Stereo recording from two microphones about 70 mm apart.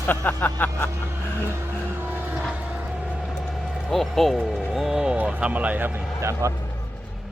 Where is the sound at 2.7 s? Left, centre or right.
Centre.